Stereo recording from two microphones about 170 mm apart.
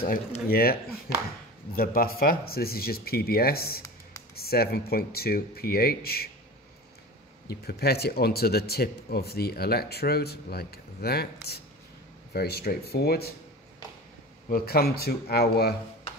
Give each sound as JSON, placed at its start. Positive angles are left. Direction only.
{"t": 0.5, "sound": "speech", "side_deg": 60}
{"t": 7.4, "sound": "speech", "side_deg": 70}
{"t": 14.5, "sound": "speech", "side_deg": 65}